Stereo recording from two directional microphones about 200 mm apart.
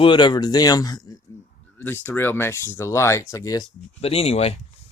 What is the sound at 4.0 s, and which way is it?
Speech, 30° left (ahead or behind).